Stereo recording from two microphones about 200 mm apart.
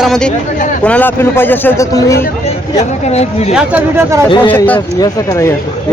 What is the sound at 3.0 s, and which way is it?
Speech, 35° left (ahead or behind).